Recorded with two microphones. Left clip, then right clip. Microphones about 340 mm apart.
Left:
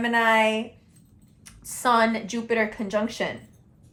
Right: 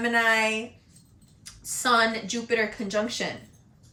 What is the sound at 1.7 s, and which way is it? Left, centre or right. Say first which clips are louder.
A woman's voice: left 1 dB; centre.